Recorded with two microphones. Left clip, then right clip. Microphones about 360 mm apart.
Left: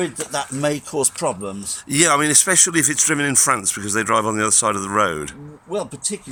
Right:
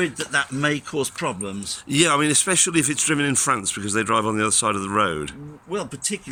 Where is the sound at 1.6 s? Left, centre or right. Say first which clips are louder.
Left 2 dB; centre.